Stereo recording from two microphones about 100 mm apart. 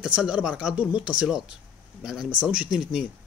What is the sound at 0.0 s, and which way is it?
Speech, 10° right (ahead or behind).